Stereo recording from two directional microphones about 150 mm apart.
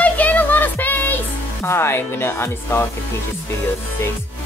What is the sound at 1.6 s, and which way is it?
Speech, 15° left (ahead or behind).